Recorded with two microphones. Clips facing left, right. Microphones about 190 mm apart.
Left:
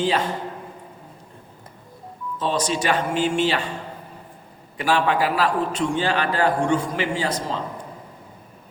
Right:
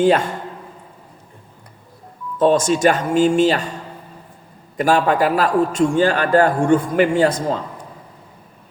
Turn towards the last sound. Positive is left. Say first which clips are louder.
# right 8 dB
turn(degrees=-50)  # may be behind; listen again after turning